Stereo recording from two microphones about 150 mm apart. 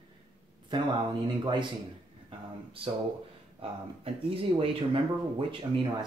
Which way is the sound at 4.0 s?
40° right (ahead or behind).